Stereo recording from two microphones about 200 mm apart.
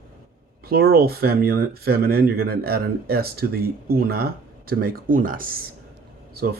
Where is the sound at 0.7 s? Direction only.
50° right (ahead or behind).